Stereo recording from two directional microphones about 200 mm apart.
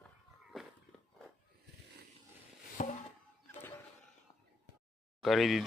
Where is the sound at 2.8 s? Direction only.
35° left (ahead or behind).